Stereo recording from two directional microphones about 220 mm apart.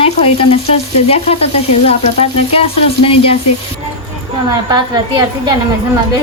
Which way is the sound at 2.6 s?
25° left (ahead or behind).